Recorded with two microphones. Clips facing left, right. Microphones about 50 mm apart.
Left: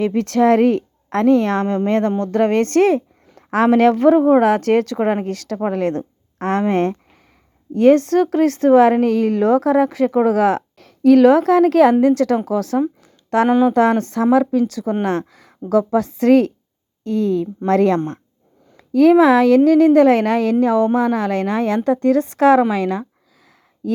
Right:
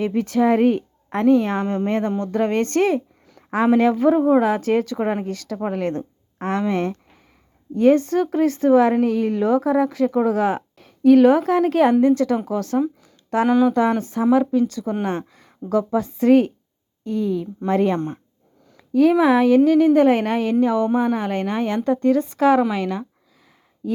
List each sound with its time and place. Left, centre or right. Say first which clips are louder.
0.0 s a woman's voice: left 3 dB; left
1.6 s speech: left 4 dB; left
3.7 s a woman's voice: left 4 dB; left
7.7 s a woman's voice: left 4 dB; left
13.0 s a sound: left 4 dB; left
13.5 s speech: left 1 dB; left
13.7 s a woman's voice: left 4 dB; left
23.8 s speech: left 3 dB; left